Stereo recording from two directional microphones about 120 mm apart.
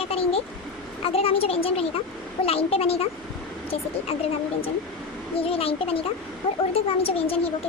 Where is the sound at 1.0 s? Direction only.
55° left (ahead or behind).